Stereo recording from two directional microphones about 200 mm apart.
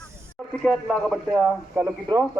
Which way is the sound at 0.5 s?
5° left (ahead or behind).